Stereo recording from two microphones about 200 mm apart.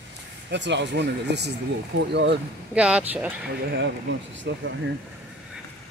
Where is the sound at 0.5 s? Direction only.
60° right (ahead or behind).